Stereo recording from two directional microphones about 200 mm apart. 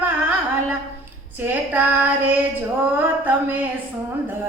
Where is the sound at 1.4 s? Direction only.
10° right (ahead or behind).